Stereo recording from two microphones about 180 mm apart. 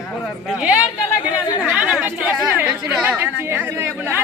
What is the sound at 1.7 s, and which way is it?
A woman's voice, 5° right (ahead or behind).